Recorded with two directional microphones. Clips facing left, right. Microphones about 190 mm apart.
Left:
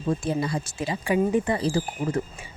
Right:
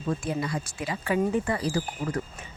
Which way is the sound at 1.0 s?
15° left (ahead or behind).